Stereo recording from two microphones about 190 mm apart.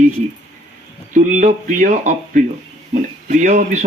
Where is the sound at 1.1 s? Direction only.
40° right (ahead or behind).